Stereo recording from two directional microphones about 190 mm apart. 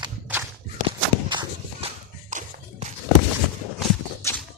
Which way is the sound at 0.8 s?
25° right (ahead or behind).